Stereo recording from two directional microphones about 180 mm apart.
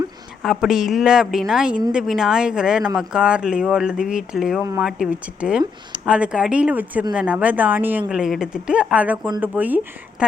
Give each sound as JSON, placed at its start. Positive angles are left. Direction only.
{"t": 0.4, "sound": "speech", "side_deg": 0}